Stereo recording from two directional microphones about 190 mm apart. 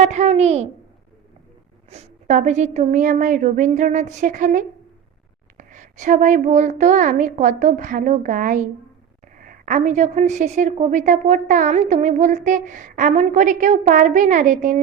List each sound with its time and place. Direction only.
0.0 s a woman's voice: 35° right (ahead or behind)
1.9 s a child's voice: 35° right (ahead or behind)